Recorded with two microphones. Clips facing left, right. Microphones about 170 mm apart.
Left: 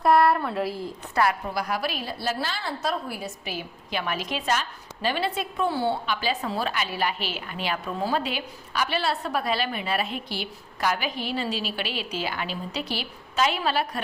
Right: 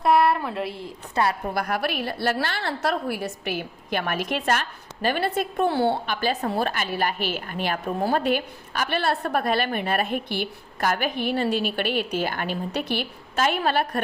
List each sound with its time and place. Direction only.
0.0 s a sound: centre (ahead or behind)
1.1 s a woman's voice: 25° right (ahead or behind)
1.5 s a woman's voice: 55° right (ahead or behind)
6.1 s a woman's voice: 50° right (ahead or behind)